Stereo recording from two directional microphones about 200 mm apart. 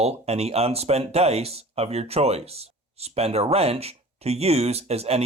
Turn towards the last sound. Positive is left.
turn(degrees=-30)  # may be behind; listen again after turning